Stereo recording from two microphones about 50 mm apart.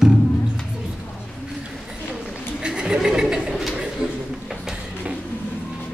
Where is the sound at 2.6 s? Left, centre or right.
Centre.